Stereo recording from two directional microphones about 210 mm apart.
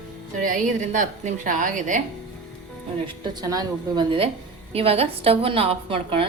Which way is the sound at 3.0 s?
20° right (ahead or behind).